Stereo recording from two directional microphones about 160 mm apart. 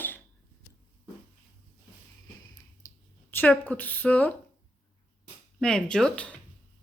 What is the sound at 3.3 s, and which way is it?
Speech, 10° left (ahead or behind).